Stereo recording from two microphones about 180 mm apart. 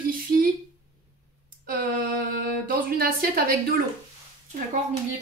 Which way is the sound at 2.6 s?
55° right (ahead or behind).